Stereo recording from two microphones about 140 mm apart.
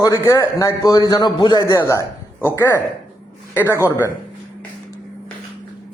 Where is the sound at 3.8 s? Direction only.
20° left (ahead or behind).